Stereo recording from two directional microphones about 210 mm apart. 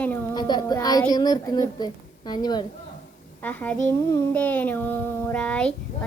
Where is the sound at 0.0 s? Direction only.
10° left (ahead or behind).